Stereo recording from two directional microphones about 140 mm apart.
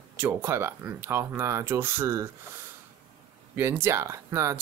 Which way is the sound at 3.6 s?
15° right (ahead or behind).